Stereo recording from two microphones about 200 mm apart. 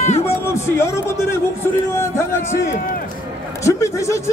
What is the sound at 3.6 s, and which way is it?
Speech, 15° left (ahead or behind).